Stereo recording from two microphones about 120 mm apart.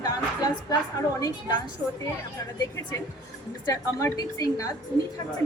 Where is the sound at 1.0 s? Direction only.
30° left (ahead or behind).